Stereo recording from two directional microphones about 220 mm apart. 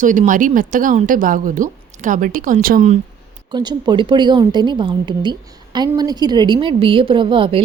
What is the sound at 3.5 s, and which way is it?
A woman's voice, 20° right (ahead or behind).